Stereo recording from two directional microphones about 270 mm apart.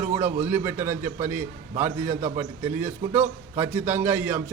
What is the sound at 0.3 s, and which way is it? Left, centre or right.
A man's voice, centre.